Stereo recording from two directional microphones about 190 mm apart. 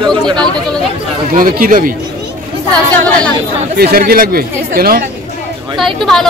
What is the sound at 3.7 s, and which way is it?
Speech, 55° right (ahead or behind).